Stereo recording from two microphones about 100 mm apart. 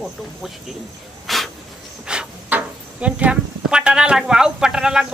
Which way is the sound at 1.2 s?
Centre (ahead or behind).